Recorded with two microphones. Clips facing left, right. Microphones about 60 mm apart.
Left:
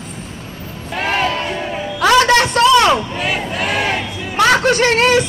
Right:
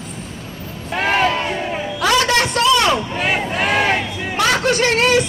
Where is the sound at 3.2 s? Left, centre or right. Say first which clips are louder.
Right 1 dB; right.